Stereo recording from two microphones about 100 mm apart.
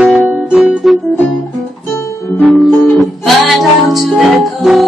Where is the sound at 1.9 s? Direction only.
25° left (ahead or behind).